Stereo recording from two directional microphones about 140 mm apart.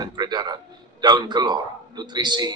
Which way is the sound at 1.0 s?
30° right (ahead or behind).